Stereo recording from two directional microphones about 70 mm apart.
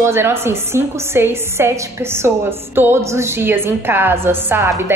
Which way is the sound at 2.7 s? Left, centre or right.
Right.